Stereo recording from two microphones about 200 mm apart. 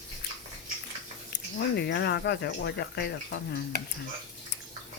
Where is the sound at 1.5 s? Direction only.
60° left (ahead or behind).